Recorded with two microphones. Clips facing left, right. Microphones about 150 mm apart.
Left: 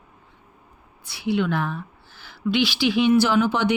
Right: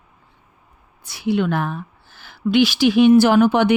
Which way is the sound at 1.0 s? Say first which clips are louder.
Right 3 dB; 45° right (ahead or behind).